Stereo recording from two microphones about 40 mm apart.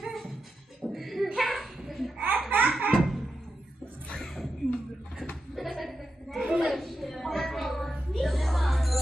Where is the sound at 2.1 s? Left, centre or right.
Right.